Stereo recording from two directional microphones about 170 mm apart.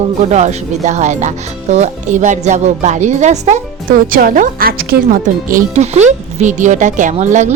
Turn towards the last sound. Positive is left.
turn(degrees=-45)  # may be behind; listen again after turning